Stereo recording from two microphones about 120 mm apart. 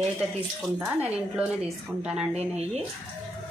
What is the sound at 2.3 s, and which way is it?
Speech, 60° right (ahead or behind).